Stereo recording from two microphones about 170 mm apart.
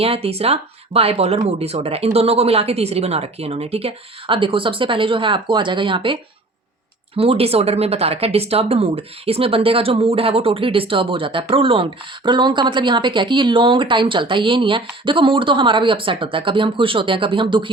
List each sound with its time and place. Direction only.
0.0 s speech: 35° right (ahead or behind)
7.2 s a woman's voice: 35° right (ahead or behind)